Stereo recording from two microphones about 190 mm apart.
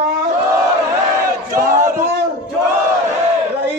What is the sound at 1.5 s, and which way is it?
Battle cry, 50° right (ahead or behind).